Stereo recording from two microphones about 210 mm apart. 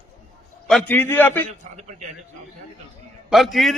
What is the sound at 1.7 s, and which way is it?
Speech, 35° right (ahead or behind).